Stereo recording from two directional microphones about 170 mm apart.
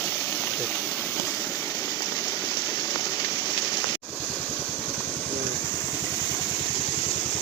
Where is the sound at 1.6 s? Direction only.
20° left (ahead or behind).